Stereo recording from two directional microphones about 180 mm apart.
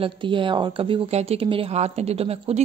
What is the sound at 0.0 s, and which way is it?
Speech, 30° right (ahead or behind).